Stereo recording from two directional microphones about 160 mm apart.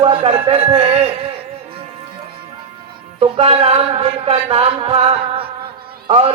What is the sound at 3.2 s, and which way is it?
A man's voice, 35° right (ahead or behind).